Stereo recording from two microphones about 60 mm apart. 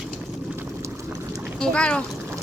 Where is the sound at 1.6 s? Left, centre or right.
Centre.